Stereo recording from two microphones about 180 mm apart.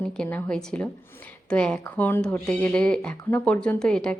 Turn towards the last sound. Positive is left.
turn(degrees=5)  # may be behind; listen again after turning